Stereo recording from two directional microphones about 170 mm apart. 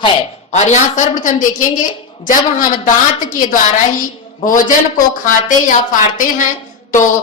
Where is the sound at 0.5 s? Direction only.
45° left (ahead or behind).